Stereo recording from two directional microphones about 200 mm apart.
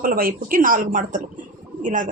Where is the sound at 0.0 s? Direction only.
45° right (ahead or behind).